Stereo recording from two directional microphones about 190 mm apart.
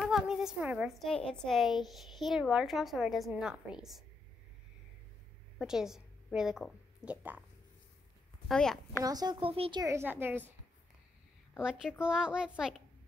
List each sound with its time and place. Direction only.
0.0 s a woman's voice: centre (ahead or behind)
5.6 s a woman's voice: 5° right (ahead or behind)
8.5 s a woman's voice: 5° left (ahead or behind)
9.0 s speech: 20° right (ahead or behind)
12.0 s a woman's voice: 5° right (ahead or behind)